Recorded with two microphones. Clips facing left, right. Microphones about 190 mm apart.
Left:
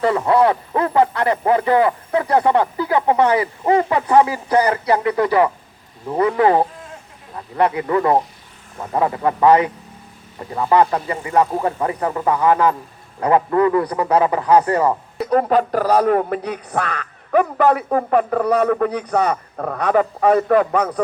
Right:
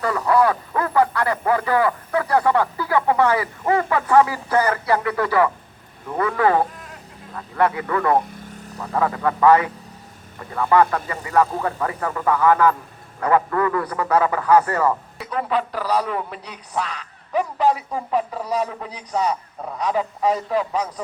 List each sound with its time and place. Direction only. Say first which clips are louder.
0.0 s speech: left 3 dB; 25° left (ahead or behind)
8.2 s vehicle: right 4 dB; 50° right (ahead or behind)
8.8 s speech: left 3 dB; 20° left (ahead or behind)
15.2 s a man's voice: left 9 dB; 45° left (ahead or behind)